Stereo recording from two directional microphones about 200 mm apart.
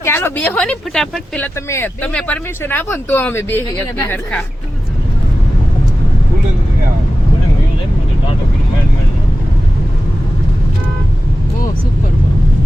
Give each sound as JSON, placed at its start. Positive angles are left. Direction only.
{"t": 0.0, "sound": "speech", "side_deg": 15}